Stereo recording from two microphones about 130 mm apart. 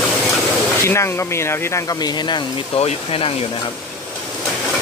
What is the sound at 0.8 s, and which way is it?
Speech, 20° left (ahead or behind).